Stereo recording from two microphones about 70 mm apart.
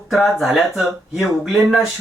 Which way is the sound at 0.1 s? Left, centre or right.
Centre.